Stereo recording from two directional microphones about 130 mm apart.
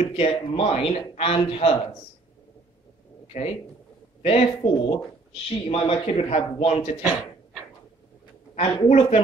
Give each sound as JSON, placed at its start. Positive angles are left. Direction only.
{"t": 0.1, "sound": "a man's voice", "side_deg": 50}
{"t": 3.3, "sound": "a man's voice", "side_deg": 60}
{"t": 8.5, "sound": "a man's voice", "side_deg": 45}